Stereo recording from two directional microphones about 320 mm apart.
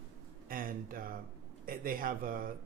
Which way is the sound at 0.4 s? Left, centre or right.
Right.